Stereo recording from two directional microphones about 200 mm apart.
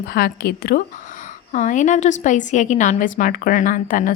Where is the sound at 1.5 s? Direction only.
40° left (ahead or behind).